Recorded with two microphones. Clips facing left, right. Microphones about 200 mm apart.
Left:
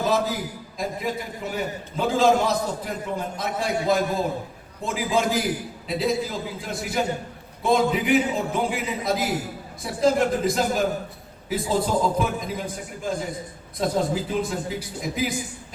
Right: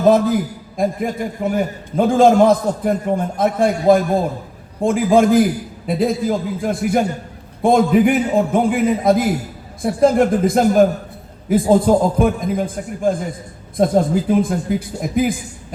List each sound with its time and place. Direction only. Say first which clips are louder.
0.0 s a man's voice: right 10 dB; 55° right (ahead or behind)